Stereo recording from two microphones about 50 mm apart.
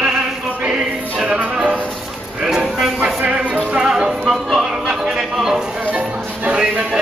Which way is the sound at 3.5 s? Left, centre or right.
Centre.